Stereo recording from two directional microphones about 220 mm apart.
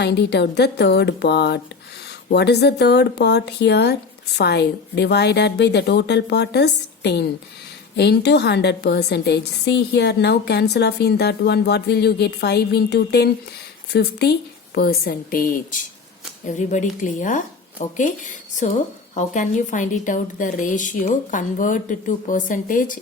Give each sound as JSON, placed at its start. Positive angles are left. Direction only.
{"t": 0.0, "sound": "a woman's voice", "side_deg": 50}